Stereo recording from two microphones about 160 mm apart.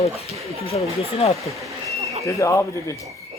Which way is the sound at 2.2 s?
20° left (ahead or behind).